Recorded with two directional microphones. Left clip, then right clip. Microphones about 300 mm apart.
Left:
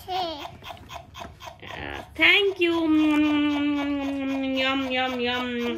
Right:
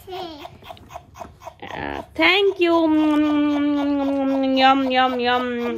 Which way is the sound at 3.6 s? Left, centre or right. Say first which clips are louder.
Right 5 dB; centre.